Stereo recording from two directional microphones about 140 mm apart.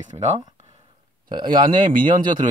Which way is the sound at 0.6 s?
50° right (ahead or behind).